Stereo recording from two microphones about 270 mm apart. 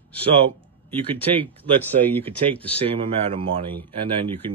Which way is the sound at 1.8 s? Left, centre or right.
Centre.